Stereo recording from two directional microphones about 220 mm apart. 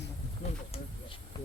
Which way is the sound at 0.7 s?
25° left (ahead or behind).